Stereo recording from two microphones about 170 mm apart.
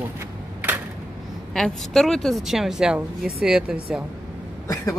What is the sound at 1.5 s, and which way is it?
Speech, centre (ahead or behind).